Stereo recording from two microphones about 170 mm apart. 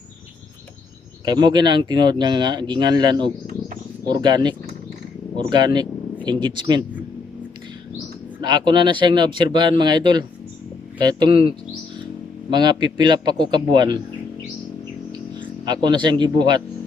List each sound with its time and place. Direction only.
1.2 s speech: 25° right (ahead or behind)
8.4 s speech: 25° right (ahead or behind)
12.5 s speech: 25° right (ahead or behind)
15.4 s speech: 25° right (ahead or behind)